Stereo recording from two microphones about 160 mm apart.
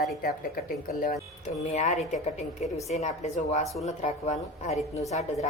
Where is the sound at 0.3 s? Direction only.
60° left (ahead or behind).